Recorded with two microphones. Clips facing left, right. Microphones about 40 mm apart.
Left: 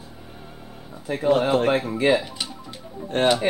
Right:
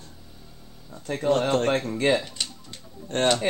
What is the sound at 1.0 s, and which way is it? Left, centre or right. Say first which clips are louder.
Speech: left 3 dB; centre.